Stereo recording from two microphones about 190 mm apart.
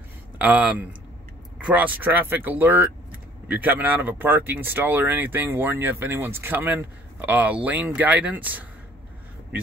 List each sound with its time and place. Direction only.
0.4 s speech: 10° right (ahead or behind)